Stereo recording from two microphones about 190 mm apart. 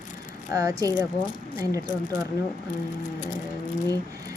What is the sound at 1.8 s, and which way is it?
Speech, 45° left (ahead or behind).